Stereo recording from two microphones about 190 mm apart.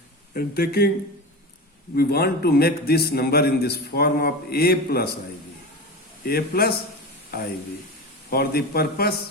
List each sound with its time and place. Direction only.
0.3 s a man's voice: 55° left (ahead or behind)
2.0 s a man's voice: 55° left (ahead or behind)
6.2 s a man's voice: 55° left (ahead or behind)
8.3 s a man's voice: 55° left (ahead or behind)